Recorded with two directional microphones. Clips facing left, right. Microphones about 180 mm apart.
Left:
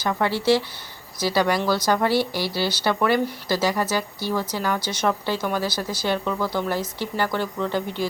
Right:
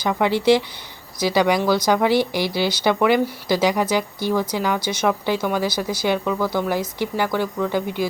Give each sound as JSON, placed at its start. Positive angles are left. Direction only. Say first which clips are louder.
{"t": 0.0, "sound": "speech", "louder": "right 4 dB", "side_deg": -15}